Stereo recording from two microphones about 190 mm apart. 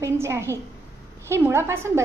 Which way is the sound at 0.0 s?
15° right (ahead or behind).